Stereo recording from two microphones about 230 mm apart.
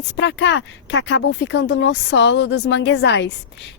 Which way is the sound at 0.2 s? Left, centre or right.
Left.